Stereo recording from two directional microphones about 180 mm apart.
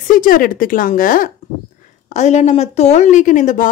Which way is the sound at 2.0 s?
40° left (ahead or behind).